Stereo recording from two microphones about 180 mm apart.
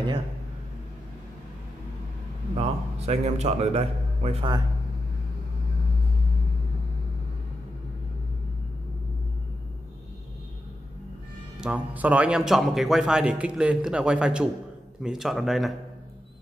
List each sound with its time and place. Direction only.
2.5 s a man's voice: 35° right (ahead or behind)
11.6 s speech: 10° right (ahead or behind)